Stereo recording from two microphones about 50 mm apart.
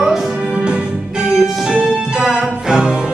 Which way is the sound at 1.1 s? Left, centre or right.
Centre.